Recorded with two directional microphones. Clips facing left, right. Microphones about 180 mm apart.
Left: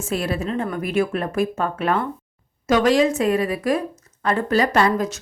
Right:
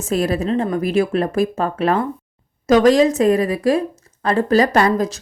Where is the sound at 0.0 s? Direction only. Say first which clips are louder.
Right 5 dB; 40° right (ahead or behind).